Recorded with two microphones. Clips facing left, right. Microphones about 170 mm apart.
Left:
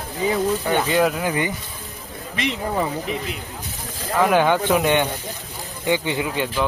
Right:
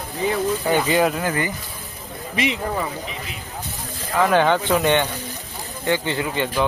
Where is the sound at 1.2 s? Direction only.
15° left (ahead or behind).